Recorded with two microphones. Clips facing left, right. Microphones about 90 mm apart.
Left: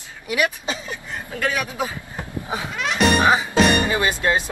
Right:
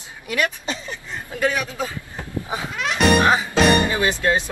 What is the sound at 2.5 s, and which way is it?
Music, centre (ahead or behind).